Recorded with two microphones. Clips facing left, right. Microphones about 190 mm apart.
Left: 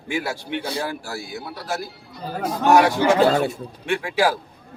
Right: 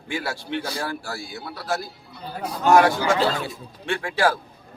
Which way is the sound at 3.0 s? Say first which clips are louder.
Left 5 dB; 50° left (ahead or behind).